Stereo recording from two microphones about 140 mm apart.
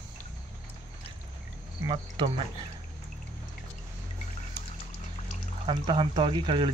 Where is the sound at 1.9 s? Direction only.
40° right (ahead or behind).